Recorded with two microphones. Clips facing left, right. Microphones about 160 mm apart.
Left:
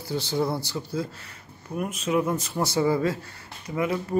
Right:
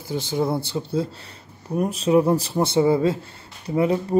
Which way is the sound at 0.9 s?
30° right (ahead or behind).